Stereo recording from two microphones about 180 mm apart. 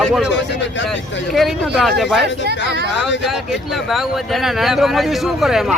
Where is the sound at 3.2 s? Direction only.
Centre (ahead or behind).